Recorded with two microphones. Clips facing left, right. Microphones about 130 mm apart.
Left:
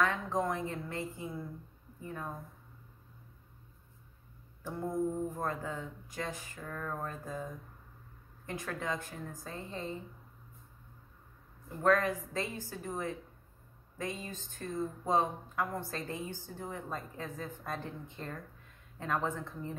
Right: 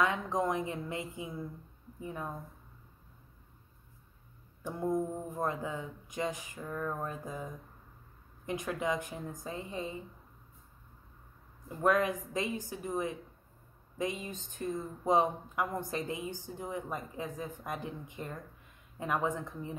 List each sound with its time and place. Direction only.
0.0 s speech: 15° right (ahead or behind)
5.3 s speech: 15° right (ahead or behind)
8.5 s speech: 15° right (ahead or behind)
11.8 s speech: 15° right (ahead or behind)